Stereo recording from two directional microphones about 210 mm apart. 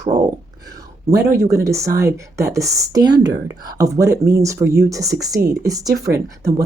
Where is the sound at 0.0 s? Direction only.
20° right (ahead or behind).